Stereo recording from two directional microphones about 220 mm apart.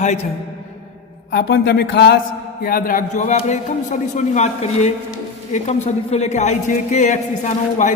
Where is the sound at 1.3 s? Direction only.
50° left (ahead or behind).